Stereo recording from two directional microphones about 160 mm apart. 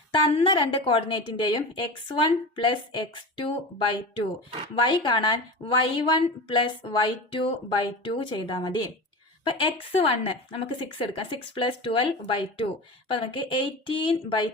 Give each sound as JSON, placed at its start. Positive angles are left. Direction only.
{"t": 0.1, "sound": "a woman's voice", "side_deg": 30}